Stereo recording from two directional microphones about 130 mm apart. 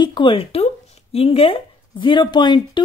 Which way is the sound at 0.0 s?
40° left (ahead or behind).